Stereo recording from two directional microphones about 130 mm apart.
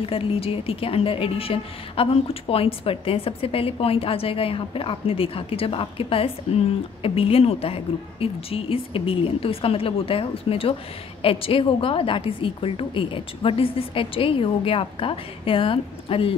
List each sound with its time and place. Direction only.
0.0 s a woman's voice: 45° left (ahead or behind)